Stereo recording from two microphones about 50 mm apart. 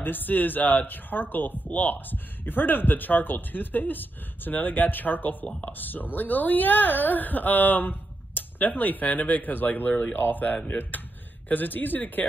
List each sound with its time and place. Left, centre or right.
0.0 s speech: left